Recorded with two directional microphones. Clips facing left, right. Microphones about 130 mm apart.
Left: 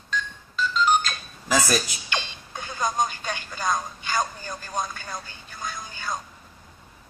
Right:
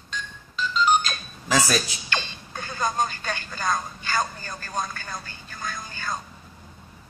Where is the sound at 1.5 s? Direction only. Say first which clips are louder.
Even; 5° left (ahead or behind).